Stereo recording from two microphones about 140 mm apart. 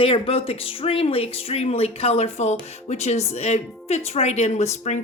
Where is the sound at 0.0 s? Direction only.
40° left (ahead or behind).